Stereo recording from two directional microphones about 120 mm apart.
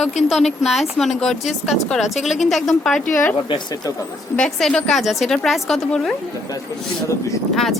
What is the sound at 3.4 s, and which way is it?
Speech, 35° left (ahead or behind).